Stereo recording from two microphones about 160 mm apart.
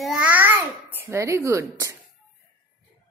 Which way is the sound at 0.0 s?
5° right (ahead or behind).